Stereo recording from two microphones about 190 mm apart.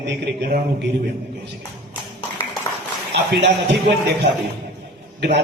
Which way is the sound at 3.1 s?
60° right (ahead or behind).